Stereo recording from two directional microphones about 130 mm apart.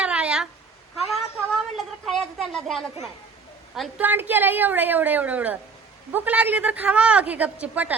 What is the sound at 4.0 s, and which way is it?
A woman's voice, 15° right (ahead or behind).